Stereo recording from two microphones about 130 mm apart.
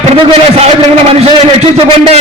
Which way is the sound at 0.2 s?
50° right (ahead or behind).